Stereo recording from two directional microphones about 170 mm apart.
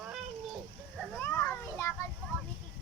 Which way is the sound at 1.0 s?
10° left (ahead or behind).